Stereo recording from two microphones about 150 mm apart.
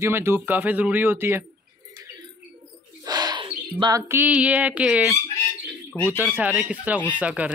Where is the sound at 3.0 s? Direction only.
25° right (ahead or behind).